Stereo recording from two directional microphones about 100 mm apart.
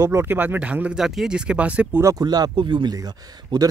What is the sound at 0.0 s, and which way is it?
Speech, 25° right (ahead or behind).